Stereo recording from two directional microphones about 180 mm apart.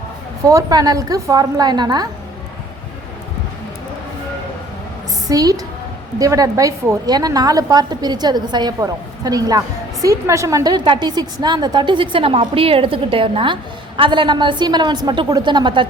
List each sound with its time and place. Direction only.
0.4 s a woman's voice: 20° right (ahead or behind)
5.3 s a woman's voice: 20° right (ahead or behind)